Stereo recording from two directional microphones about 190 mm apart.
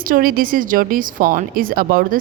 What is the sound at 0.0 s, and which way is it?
A woman's voice, 50° right (ahead or behind).